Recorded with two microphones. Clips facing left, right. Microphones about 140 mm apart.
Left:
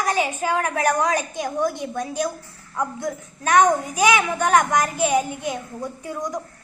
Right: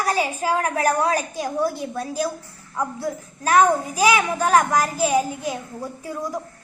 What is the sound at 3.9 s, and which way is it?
A child's voice, 30° right (ahead or behind).